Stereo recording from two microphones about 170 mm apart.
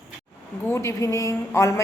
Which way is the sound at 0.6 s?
15° left (ahead or behind).